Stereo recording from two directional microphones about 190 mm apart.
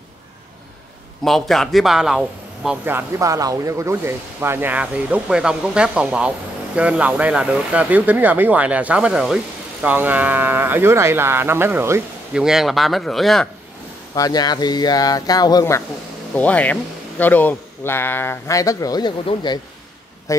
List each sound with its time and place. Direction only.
1.2 s a man's voice: centre (ahead or behind)
12.4 s speech: centre (ahead or behind)
14.1 s speech: 20° left (ahead or behind)